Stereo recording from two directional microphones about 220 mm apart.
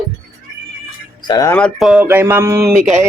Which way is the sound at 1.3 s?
15° left (ahead or behind).